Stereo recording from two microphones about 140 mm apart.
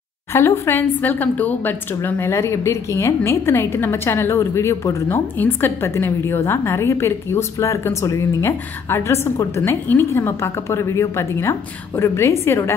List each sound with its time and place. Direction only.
0.3 s a woman's voice: 15° left (ahead or behind)